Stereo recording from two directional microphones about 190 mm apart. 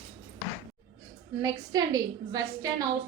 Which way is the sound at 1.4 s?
20° right (ahead or behind).